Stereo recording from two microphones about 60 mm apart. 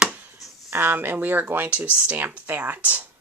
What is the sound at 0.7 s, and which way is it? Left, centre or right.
Speech, right.